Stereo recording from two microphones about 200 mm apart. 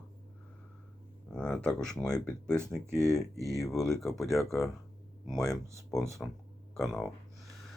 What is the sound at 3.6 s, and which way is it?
Speech, centre (ahead or behind).